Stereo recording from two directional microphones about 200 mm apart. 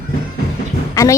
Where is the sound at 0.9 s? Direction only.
15° left (ahead or behind).